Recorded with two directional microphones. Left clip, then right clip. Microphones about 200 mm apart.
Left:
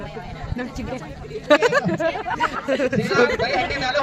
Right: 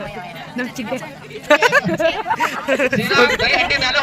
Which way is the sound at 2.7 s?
5° right (ahead or behind).